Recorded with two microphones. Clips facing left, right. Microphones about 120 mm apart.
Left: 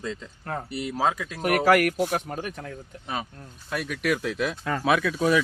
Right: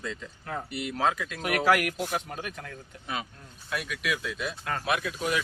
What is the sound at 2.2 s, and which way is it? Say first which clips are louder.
Speech: left 4 dB; 35° left (ahead or behind).